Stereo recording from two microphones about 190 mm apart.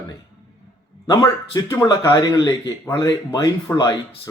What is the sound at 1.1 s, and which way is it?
A man's voice, 20° left (ahead or behind).